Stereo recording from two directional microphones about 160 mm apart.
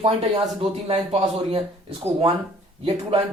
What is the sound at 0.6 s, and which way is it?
Speech, 35° right (ahead or behind).